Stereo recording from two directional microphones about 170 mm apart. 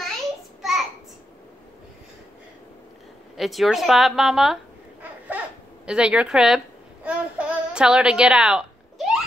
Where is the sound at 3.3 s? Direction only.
Centre (ahead or behind).